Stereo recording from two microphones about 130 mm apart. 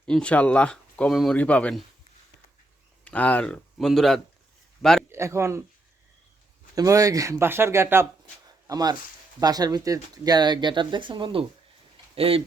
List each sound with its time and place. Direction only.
0.0 s speech: 10° left (ahead or behind)
3.0 s a man's voice: 10° left (ahead or behind)
5.0 s speech: 20° right (ahead or behind)
6.7 s speech: 25° right (ahead or behind); by 12.4 s 45° right (ahead or behind)